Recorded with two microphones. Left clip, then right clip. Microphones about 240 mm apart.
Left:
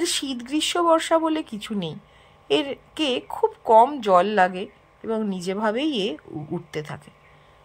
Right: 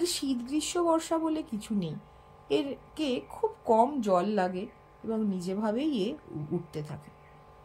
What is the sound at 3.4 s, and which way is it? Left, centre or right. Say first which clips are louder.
Speech: left 9 dB; left.